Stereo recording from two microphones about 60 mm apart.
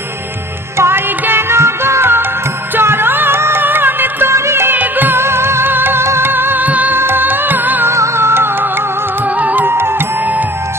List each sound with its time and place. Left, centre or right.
0.7 s music: right
4.7 s music: right
5.2 s music: right
7.9 s music: right
9.4 s music: right
9.7 s music: right